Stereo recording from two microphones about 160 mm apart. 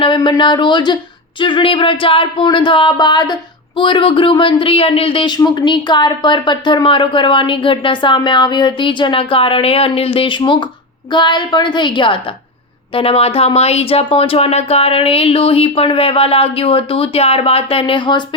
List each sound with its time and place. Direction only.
0.0 s a woman's voice: 30° left (ahead or behind)